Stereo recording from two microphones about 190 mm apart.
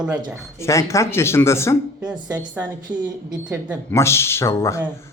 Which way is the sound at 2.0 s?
5° right (ahead or behind).